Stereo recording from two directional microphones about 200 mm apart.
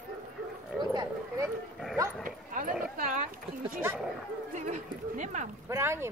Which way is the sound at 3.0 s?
40° right (ahead or behind).